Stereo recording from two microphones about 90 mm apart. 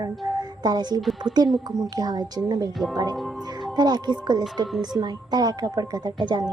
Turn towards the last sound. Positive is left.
turn(degrees=-55)  # may be behind; listen again after turning